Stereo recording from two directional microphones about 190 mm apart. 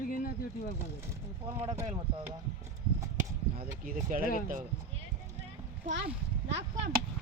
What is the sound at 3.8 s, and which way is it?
Speech, 45° right (ahead or behind).